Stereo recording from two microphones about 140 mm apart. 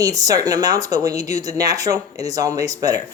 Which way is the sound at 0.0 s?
25° right (ahead or behind).